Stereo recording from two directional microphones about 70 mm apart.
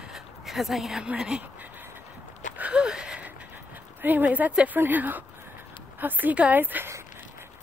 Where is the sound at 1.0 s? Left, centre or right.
Centre.